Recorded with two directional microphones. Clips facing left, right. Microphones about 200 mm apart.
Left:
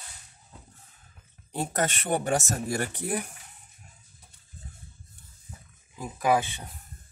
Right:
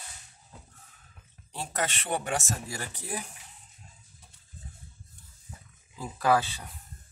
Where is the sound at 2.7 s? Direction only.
60° left (ahead or behind).